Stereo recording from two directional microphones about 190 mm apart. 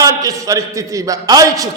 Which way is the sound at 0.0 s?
20° right (ahead or behind).